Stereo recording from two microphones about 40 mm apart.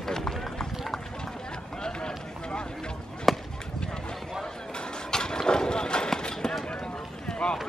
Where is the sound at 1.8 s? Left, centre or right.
Left.